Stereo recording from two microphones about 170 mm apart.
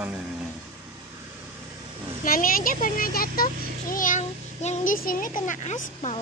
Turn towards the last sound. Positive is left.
turn(degrees=45)  # may be behind; listen again after turning